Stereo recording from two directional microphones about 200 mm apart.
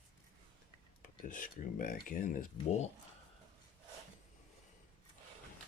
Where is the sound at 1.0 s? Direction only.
45° left (ahead or behind).